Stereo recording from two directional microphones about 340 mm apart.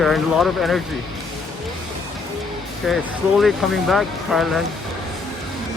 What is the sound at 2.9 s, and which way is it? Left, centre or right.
Speech, centre.